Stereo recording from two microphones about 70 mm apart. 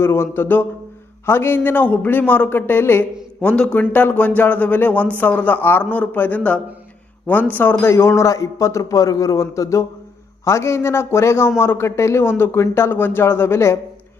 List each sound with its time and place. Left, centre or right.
0.0 s a man's voice: left
3.4 s a man's voice: centre; by 13.7 s left